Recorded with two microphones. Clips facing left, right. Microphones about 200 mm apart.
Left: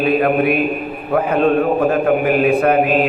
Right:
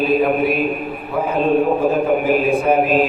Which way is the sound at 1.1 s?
65° left (ahead or behind).